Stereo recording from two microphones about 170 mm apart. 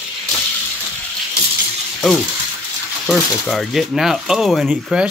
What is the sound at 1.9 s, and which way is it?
Frying, centre (ahead or behind).